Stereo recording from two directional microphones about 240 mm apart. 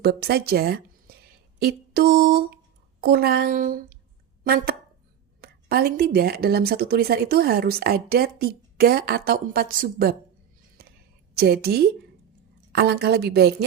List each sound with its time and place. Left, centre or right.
0.0 s a woman's voice: right
11.3 s a woman's voice: right